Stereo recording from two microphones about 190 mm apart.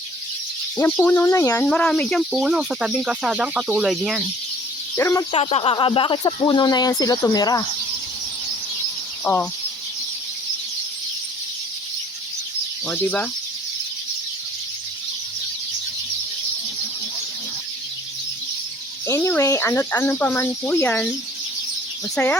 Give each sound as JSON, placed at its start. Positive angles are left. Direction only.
{"t": 0.8, "sound": "speech", "side_deg": 10}
{"t": 4.9, "sound": "speech", "side_deg": 15}
{"t": 5.3, "sound": "speech", "side_deg": 30}
{"t": 9.2, "sound": "speech", "side_deg": 10}
{"t": 12.9, "sound": "speech", "side_deg": 10}
{"t": 19.0, "sound": "speech", "side_deg": 15}
{"t": 22.1, "sound": "speech", "side_deg": 5}